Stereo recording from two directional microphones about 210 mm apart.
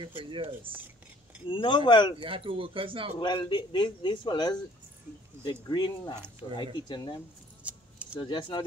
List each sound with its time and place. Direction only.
0.0 s speech: 25° right (ahead or behind)
1.5 s a man's voice: 25° left (ahead or behind)
2.1 s speech: 25° right (ahead or behind)
3.2 s a man's voice: 20° left (ahead or behind)
5.7 s a man's voice: 20° left (ahead or behind)
7.6 s keys jangling: 5° right (ahead or behind)
8.2 s a man's voice: 20° left (ahead or behind)